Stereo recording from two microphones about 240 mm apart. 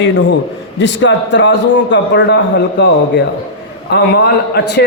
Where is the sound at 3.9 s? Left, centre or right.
Left.